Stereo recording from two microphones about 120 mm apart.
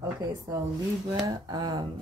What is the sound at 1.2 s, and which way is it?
Speech, 35° right (ahead or behind).